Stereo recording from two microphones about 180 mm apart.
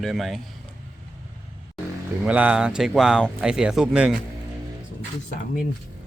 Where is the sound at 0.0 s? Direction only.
Centre (ahead or behind).